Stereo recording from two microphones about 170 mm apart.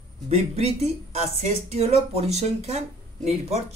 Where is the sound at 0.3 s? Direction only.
40° right (ahead or behind).